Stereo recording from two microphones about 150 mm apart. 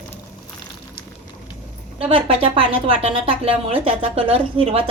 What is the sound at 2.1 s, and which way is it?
Speech, 40° right (ahead or behind).